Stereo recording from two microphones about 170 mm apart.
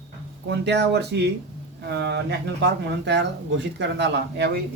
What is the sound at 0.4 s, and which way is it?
Speech, 80° right.